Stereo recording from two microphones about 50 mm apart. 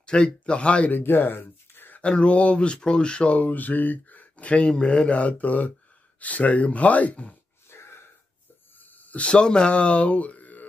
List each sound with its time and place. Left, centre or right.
0.0 s speech: centre
0.9 s speech: left
2.0 s speech: left
7.7 s wheeze: left
8.9 s speech: left